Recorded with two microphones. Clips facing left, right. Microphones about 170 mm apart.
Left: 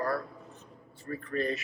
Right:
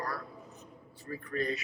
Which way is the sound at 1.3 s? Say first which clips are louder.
Left 2 dB; 35° left (ahead or behind).